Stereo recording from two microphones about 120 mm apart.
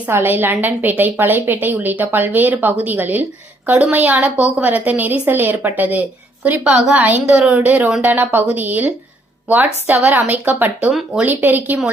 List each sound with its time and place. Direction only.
0.0 s a woman's voice: 20° right (ahead or behind)